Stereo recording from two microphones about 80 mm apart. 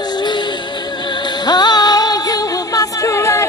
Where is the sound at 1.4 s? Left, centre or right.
Left.